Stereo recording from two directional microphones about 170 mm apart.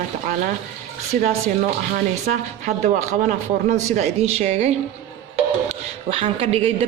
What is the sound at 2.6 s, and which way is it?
A man's voice, 45° right (ahead or behind).